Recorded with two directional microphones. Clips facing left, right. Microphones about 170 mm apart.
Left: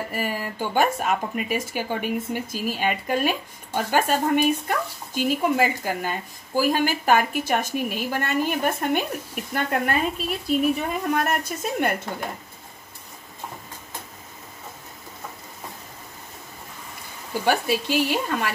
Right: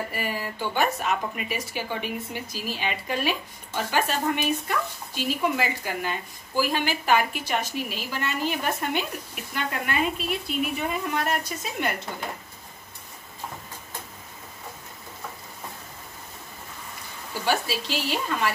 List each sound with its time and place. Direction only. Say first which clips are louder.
0.1 s speech: left 3 dB; 45° left (ahead or behind)
17.5 s speech: left 4 dB; 55° left (ahead or behind)